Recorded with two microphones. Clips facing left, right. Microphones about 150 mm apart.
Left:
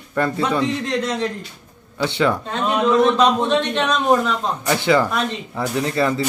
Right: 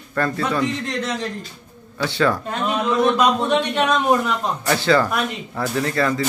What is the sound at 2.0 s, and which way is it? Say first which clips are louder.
Speech: left 1 dB; 20° left (ahead or behind).